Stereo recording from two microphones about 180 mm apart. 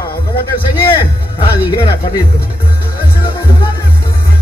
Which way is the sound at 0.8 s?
30° left (ahead or behind).